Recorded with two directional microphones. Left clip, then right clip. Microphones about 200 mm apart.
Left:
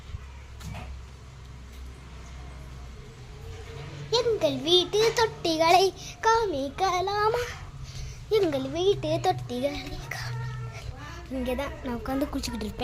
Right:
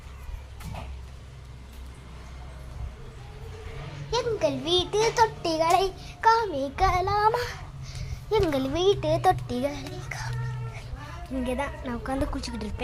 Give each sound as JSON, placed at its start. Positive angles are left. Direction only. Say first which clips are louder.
{"t": 4.1, "sound": "a sound", "louder": "left 1 dB", "side_deg": 15}
{"t": 4.9, "sound": "a woman's voice", "louder": "right 1 dB", "side_deg": 5}
{"t": 5.6, "sound": "a woman's voice", "louder": "left 4 dB", "side_deg": 25}
{"t": 7.0, "sound": "a child's voice", "louder": "right 2 dB", "side_deg": 0}
{"t": 8.5, "sound": "a child's voice", "louder": "right 2 dB", "side_deg": -10}
{"t": 11.4, "sound": "a woman's voice", "louder": "right 1 dB", "side_deg": 10}